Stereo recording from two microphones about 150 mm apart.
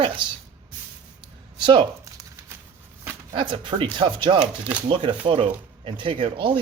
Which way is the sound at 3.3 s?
35° right (ahead or behind).